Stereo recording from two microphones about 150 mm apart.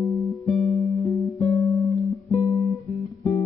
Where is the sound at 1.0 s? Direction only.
20° left (ahead or behind).